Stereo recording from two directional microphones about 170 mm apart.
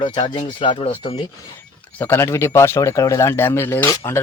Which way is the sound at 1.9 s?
15° left (ahead or behind).